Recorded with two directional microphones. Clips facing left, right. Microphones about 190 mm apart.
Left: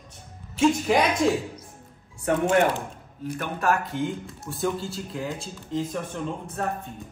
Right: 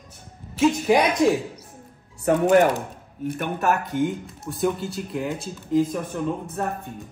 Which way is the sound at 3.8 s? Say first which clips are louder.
Right 4 dB; centre (ahead or behind).